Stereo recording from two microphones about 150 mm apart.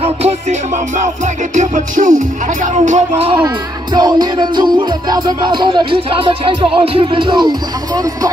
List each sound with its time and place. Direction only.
0.0 s music: 45° right (ahead or behind)
3.4 s music: 30° right (ahead or behind)